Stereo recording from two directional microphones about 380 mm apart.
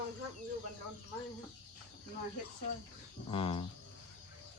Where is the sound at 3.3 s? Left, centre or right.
Centre.